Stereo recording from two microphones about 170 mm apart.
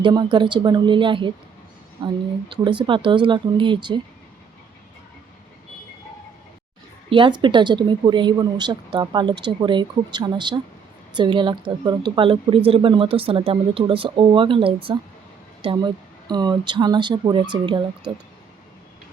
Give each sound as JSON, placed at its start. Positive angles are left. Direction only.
{"t": 0.0, "sound": "speech", "side_deg": -25}
{"t": 7.1, "sound": "speech", "side_deg": -30}